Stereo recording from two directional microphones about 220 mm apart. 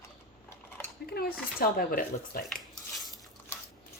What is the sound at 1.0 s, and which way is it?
Speech, 45° left (ahead or behind).